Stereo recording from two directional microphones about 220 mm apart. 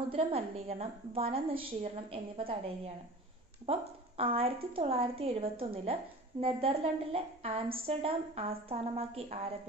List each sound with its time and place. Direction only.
0.1 s a woman's voice: 25° right (ahead or behind)
4.2 s a woman's voice: 25° right (ahead or behind)